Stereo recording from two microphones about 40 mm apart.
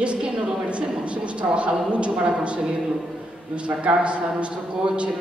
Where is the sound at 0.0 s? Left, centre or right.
Right.